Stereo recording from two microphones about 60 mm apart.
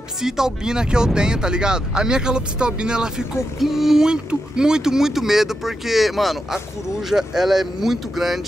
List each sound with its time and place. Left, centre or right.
0.2 s speech: centre